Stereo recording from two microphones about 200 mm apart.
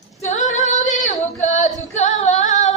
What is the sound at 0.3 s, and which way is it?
Female singing, 35° left (ahead or behind).